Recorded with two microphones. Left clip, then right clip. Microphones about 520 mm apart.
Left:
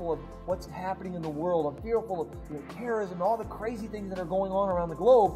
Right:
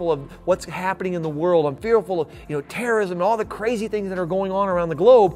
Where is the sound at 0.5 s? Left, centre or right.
Right.